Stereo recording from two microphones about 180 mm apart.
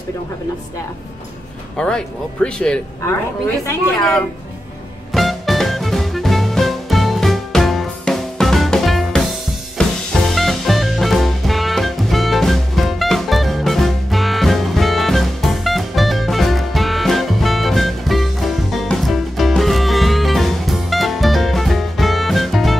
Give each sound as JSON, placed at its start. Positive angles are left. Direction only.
{"t": 1.8, "sound": "speech", "side_deg": 5}
{"t": 5.1, "sound": "music", "side_deg": 0}